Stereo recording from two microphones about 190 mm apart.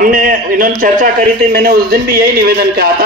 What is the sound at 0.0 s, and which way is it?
A man's voice, 50° right (ahead or behind).